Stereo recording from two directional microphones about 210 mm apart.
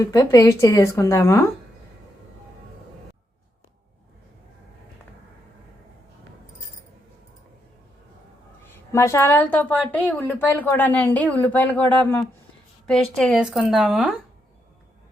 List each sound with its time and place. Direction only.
0.0 s a woman's voice: 15° left (ahead or behind)
8.9 s a woman's voice: 15° left (ahead or behind); by 14.2 s centre (ahead or behind)